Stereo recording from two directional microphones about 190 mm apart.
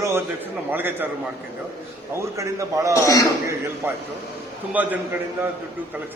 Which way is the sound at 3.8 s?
10° right (ahead or behind).